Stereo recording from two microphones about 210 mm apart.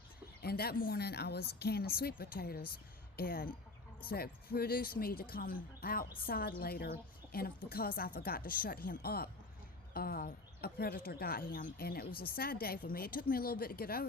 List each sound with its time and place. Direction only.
0.4 s a woman's voice: 50° left (ahead or behind)